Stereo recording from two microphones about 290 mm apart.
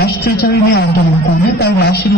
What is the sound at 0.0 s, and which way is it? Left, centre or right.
A woman's voice, left.